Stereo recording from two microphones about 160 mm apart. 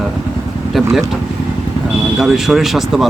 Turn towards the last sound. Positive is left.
turn(degrees=0)  # may be behind; listen again after turning